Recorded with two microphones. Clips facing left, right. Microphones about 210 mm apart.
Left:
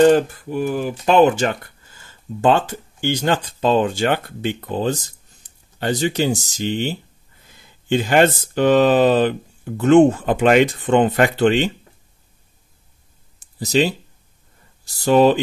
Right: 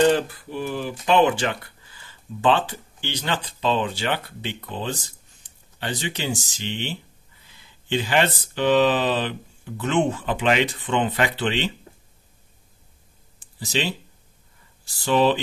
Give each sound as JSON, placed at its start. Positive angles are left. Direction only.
{"t": 0.0, "sound": "speech", "side_deg": 45}
{"t": 13.4, "sound": "a sound", "side_deg": 40}
{"t": 15.0, "sound": "speech", "side_deg": 45}